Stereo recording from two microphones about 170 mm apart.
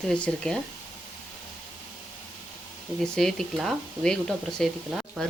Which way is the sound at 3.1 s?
5° left (ahead or behind).